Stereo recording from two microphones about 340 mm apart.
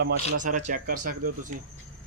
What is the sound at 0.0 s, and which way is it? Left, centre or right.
Speech, right.